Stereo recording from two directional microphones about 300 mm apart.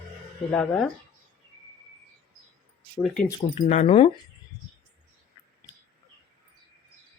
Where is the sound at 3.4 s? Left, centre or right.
Left.